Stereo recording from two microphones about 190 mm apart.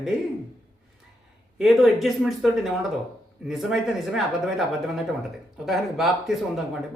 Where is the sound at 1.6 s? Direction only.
Centre (ahead or behind).